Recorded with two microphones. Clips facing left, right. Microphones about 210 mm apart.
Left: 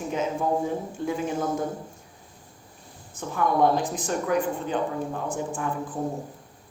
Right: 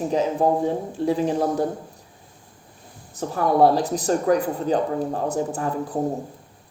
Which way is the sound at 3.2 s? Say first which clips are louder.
Right 5 dB; 35° right (ahead or behind).